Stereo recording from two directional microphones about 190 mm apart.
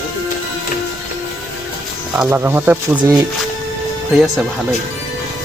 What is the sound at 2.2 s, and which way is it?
Speech, 10° right (ahead or behind).